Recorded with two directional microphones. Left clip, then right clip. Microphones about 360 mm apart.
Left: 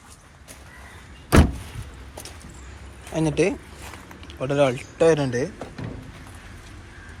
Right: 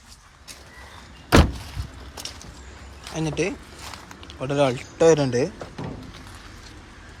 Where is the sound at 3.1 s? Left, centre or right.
Centre.